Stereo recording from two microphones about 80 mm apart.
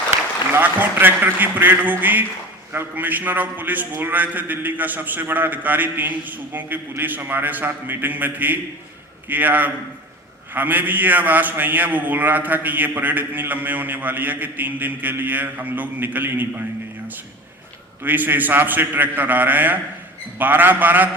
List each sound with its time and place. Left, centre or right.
0.5 s a man's voice: right
18.0 s a man's voice: right